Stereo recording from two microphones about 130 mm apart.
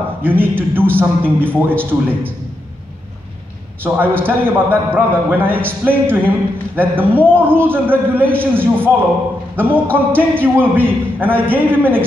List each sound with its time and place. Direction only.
0.2 s a man's voice: 15° right (ahead or behind)
3.8 s a man's voice: 15° right (ahead or behind)